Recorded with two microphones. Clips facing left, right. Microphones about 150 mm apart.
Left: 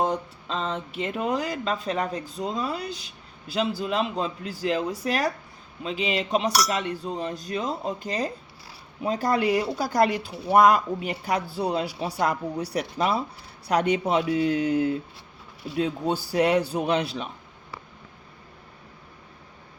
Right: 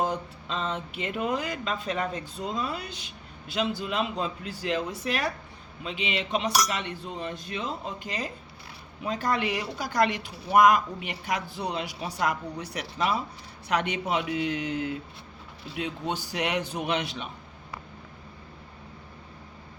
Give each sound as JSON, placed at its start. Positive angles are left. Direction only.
{"t": 0.0, "sound": "speech", "side_deg": 35}
{"t": 15.7, "sound": "speech", "side_deg": 35}